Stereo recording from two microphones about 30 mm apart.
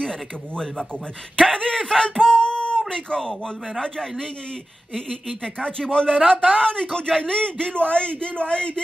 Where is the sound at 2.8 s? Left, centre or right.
Left.